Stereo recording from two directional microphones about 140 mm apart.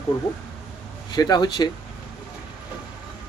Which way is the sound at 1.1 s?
30° left (ahead or behind).